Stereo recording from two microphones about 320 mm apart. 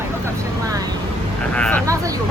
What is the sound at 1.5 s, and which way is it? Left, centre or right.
Speech, centre.